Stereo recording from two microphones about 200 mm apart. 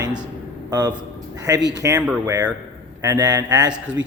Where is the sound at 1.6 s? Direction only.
60° right (ahead or behind).